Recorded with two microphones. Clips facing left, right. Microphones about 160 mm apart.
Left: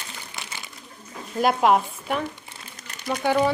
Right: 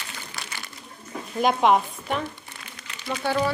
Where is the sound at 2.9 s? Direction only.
45° left (ahead or behind).